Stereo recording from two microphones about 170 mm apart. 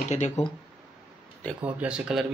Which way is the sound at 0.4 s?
40° left (ahead or behind).